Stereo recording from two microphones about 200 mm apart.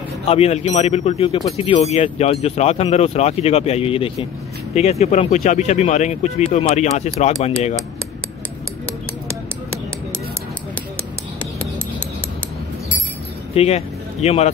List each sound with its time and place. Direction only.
0.3 s speech: 30° left (ahead or behind)
13.6 s speech: 30° left (ahead or behind)